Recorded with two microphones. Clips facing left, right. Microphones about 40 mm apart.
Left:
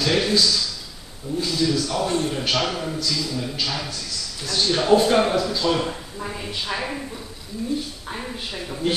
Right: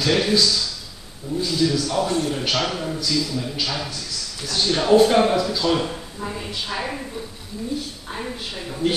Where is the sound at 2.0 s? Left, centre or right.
Left.